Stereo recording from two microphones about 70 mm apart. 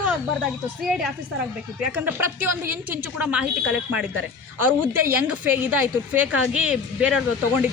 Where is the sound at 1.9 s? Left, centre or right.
Right.